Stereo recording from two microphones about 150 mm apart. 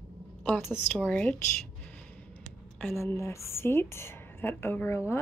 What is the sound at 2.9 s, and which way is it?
A woman's voice, 20° left (ahead or behind).